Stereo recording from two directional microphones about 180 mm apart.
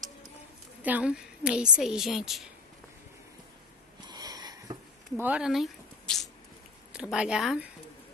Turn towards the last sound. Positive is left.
turn(degrees=-5)  # may be behind; listen again after turning